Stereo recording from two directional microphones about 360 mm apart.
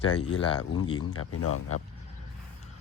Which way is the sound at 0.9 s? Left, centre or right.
Left.